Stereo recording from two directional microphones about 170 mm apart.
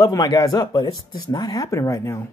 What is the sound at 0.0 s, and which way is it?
Speech, 20° left (ahead or behind).